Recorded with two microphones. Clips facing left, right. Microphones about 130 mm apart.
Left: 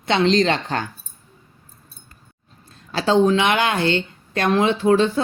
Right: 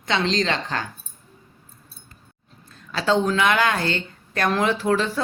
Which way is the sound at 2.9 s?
30° left (ahead or behind).